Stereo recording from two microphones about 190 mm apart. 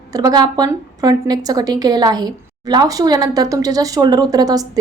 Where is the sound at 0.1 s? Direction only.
20° right (ahead or behind).